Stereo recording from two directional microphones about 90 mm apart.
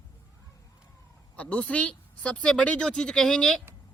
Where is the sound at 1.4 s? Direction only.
15° left (ahead or behind).